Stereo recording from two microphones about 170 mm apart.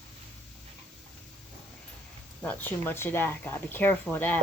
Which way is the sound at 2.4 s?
10° left (ahead or behind).